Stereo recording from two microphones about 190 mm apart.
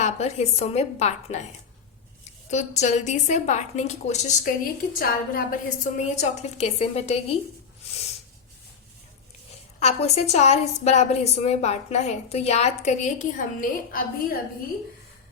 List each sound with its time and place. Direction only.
0.0 s a woman's voice: 35° left (ahead or behind)
2.5 s a woman's voice: 35° left (ahead or behind)
6.1 s a woman's voice: 35° left (ahead or behind)
9.8 s a woman's voice: 35° left (ahead or behind)